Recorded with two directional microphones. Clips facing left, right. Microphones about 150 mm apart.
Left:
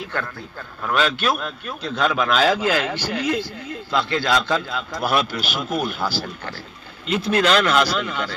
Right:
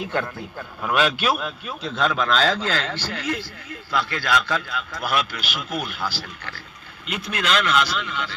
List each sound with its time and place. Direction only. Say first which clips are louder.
0.0 s a man's voice: right 3 dB; 20° right (ahead or behind)
0.9 s a man's voice: even; 5° right (ahead or behind); by 6.5 s 45° left (ahead or behind)
7.1 s speech: left 6 dB; 30° left (ahead or behind)